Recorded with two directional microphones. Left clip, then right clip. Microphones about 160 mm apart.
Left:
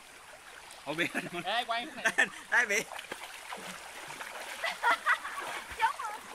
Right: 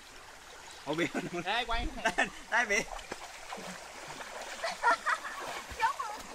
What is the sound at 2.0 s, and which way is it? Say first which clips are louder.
Speech: left 3 dB; 25° right (ahead or behind).